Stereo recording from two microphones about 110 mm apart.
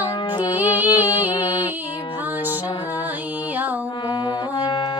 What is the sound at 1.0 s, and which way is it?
Music, 40° left (ahead or behind).